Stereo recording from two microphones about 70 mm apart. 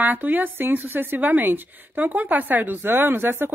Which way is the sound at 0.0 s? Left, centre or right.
Right.